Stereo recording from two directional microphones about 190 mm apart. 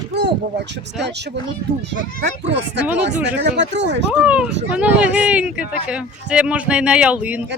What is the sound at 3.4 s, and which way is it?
Speech, 70° right (ahead or behind).